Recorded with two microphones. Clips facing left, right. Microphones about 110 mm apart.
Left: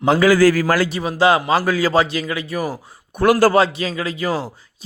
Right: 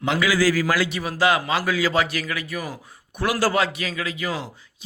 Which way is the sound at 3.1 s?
50° left (ahead or behind).